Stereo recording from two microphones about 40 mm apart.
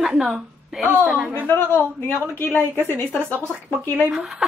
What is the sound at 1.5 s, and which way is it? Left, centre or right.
A woman's voice, left.